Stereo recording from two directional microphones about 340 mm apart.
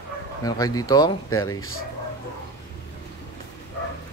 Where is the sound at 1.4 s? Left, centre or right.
Left.